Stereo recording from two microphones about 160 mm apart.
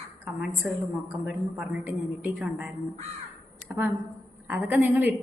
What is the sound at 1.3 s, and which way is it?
A woman's voice, 5° right (ahead or behind).